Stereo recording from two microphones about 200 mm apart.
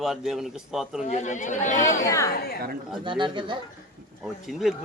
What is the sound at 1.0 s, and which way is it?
Speech, 35° left (ahead or behind).